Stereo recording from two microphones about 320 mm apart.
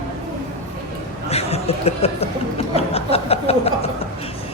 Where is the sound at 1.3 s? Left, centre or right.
Centre.